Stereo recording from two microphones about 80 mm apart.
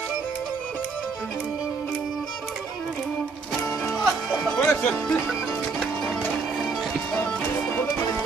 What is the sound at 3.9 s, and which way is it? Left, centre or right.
Music, centre.